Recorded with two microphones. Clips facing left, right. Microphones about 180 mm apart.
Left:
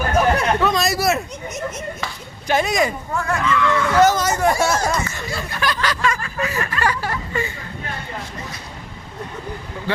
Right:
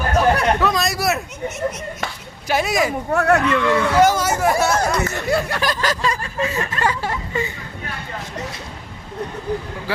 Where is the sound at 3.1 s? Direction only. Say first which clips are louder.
Right 5 dB; 70° right (ahead or behind).